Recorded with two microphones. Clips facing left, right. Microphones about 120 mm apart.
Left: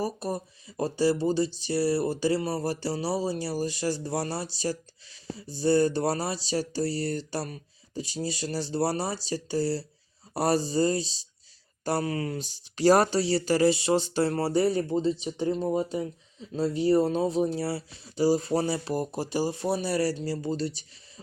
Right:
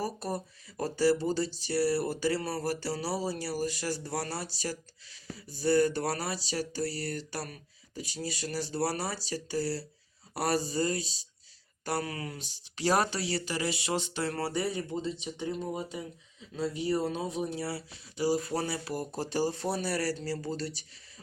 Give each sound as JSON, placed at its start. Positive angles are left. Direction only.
{"t": 0.0, "sound": "speech", "side_deg": 15}
{"t": 19.1, "sound": "speech", "side_deg": 10}